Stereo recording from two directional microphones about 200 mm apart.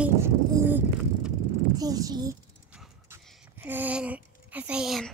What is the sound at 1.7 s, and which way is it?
Speech, 20° right (ahead or behind).